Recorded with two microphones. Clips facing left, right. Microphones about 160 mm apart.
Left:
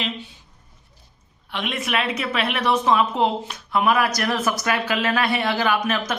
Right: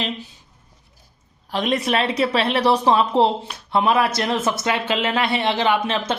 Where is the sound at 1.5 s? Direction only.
40° right (ahead or behind).